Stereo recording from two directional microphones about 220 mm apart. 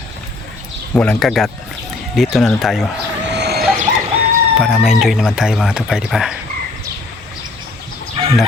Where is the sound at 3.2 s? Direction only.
50° right (ahead or behind).